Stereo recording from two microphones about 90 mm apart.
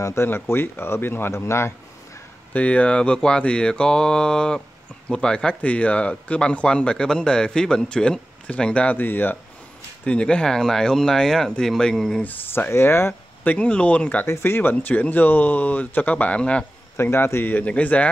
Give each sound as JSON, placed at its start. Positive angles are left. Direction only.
{"t": 0.0, "sound": "speech", "side_deg": 30}
{"t": 2.5, "sound": "speech", "side_deg": 15}
{"t": 10.0, "sound": "speech", "side_deg": 10}
{"t": 12.2, "sound": "speech", "side_deg": 20}
{"t": 14.2, "sound": "speech", "side_deg": 30}
{"t": 16.9, "sound": "speech", "side_deg": 25}